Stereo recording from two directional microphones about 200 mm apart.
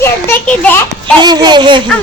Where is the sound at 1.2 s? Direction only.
20° right (ahead or behind).